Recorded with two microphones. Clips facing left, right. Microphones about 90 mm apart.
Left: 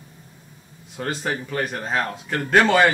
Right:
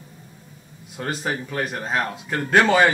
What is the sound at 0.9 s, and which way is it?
Speech, 5° right (ahead or behind).